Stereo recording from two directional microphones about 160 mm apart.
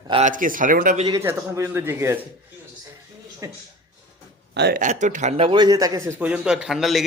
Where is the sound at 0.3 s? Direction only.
55° right (ahead or behind).